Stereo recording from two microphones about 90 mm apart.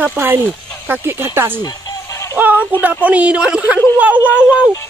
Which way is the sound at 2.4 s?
20° right (ahead or behind).